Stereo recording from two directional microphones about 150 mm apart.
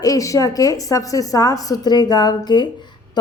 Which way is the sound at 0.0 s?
25° left (ahead or behind).